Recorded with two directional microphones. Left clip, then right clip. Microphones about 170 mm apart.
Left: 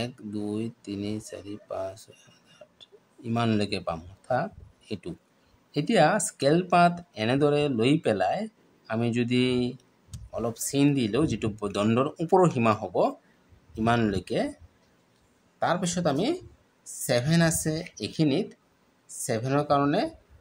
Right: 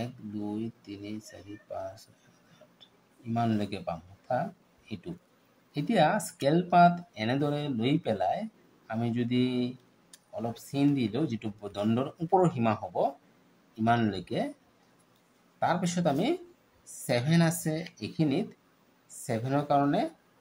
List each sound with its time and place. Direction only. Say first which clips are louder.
0.0 s speech: left 4 dB; 30° left (ahead or behind)
3.3 s speech: left 4 dB; 30° left (ahead or behind)
15.6 s speech: left 2 dB; 20° left (ahead or behind)